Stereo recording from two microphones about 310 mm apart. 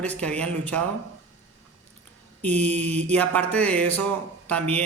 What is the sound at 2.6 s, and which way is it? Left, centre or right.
Mantra, right.